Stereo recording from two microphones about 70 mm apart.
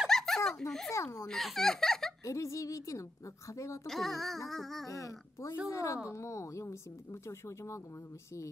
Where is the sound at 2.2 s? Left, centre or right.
Left.